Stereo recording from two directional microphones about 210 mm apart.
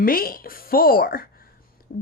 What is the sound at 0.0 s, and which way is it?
A woman's voice, 45° left (ahead or behind).